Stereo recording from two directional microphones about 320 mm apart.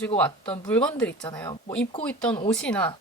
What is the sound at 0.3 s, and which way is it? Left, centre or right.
Speech, centre.